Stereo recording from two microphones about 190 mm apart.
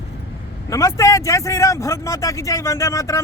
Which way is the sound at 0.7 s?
15° left (ahead or behind).